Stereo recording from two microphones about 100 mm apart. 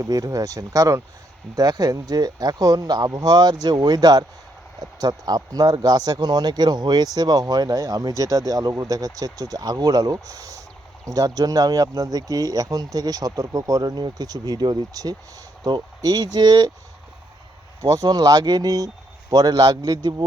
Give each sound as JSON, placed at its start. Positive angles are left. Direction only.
{"t": 0.0, "sound": "speech", "side_deg": -40}
{"t": 17.8, "sound": "speech", "side_deg": -40}